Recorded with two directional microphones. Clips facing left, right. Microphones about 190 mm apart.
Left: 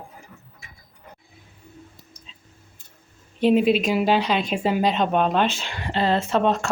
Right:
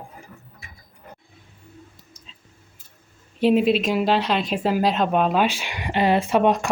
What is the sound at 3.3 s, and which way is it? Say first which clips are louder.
Speech: even; centre (ahead or behind).